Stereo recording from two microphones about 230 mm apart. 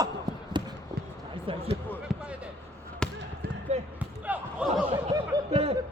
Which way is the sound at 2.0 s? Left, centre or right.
Centre.